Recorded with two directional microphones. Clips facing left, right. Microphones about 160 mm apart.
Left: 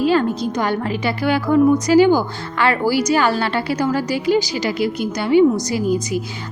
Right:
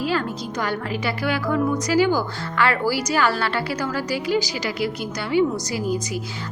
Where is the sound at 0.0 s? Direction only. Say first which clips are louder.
Left 8 dB; 25° left (ahead or behind).